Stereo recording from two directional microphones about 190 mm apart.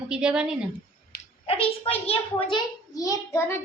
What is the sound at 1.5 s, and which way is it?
A child's voice, 30° left (ahead or behind).